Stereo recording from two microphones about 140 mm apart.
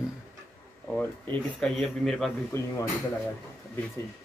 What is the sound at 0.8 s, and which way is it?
Speech, 10° left (ahead or behind).